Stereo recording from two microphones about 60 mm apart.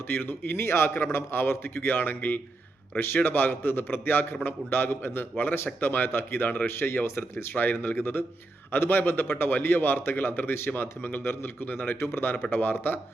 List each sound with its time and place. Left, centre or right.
0.1 s a man's voice: left